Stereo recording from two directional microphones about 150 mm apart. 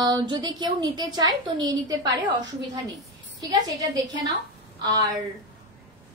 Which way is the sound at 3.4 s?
25° right (ahead or behind).